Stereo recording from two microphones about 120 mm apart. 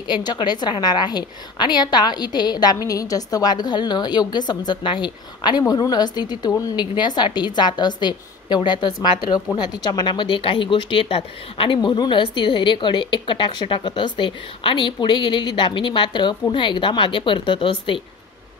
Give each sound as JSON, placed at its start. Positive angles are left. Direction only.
{"t": 0.0, "sound": "a woman's voice", "side_deg": 35}